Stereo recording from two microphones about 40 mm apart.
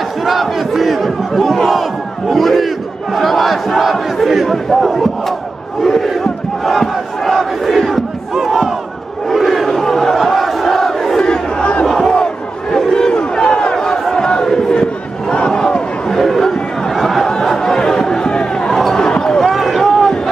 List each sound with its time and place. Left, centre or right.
0.2 s battle cry: centre
3.2 s crowd: centre
12.7 s a sound: centre
13.1 s crowd: left
14.1 s battle cry: centre
16.2 s a sound: centre
18.3 s basketball bounce: left
18.7 s basketball bounce: centre
19.4 s a sound: centre